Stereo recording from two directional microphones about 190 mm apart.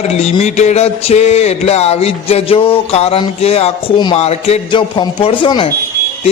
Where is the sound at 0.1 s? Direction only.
35° left (ahead or behind).